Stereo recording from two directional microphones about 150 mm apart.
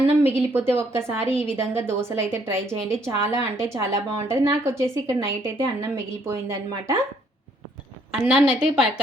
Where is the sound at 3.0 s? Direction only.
20° right (ahead or behind).